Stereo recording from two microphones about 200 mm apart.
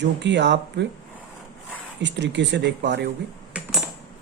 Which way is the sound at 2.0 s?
60° right (ahead or behind).